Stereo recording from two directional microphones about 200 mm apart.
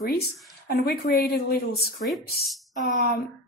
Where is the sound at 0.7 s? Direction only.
50° left (ahead or behind).